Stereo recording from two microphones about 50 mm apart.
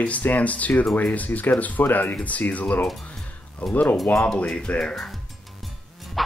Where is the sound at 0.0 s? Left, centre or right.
Left.